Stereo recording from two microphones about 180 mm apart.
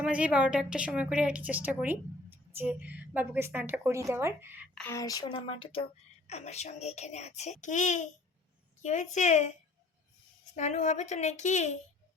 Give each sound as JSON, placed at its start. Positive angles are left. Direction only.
{"t": 0.0, "sound": "a woman's voice", "side_deg": -5}
{"t": 4.9, "sound": "a sound", "side_deg": 20}
{"t": 6.2, "sound": "a child's voice", "side_deg": 40}